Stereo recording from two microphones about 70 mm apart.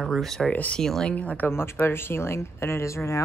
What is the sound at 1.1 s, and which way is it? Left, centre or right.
Speech, left.